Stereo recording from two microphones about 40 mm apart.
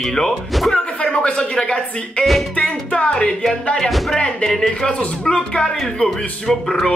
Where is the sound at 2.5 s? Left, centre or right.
Left.